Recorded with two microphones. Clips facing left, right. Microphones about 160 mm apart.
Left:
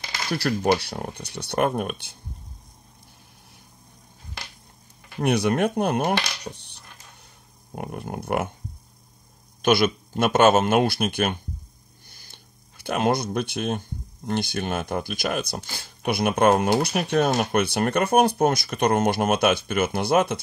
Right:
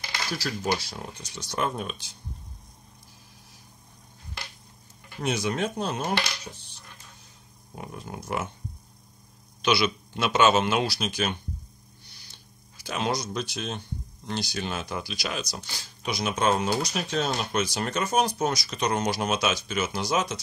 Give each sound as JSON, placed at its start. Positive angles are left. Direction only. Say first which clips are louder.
{"t": 0.3, "sound": "speech", "louder": "left 7 dB", "side_deg": 65}
{"t": 5.2, "sound": "speech", "louder": "left 6 dB", "side_deg": 60}
{"t": 9.6, "sound": "a man's voice", "louder": "left 5 dB", "side_deg": 50}